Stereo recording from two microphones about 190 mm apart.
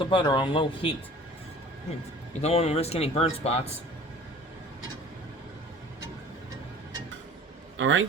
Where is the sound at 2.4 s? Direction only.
35° left (ahead or behind).